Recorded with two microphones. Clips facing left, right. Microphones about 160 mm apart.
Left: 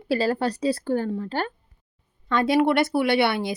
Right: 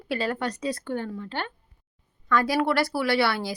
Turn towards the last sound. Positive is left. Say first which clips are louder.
# left 3 dB
turn(degrees=20)  # may be behind; listen again after turning